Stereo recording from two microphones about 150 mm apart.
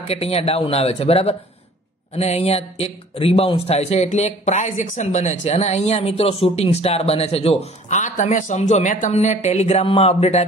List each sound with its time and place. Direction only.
0.0 s speech: 45° left (ahead or behind)